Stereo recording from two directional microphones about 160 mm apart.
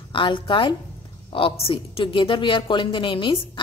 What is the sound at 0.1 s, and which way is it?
A woman's voice, 30° left (ahead or behind).